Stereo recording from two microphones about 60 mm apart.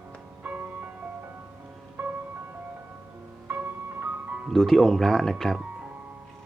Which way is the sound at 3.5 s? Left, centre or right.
Right.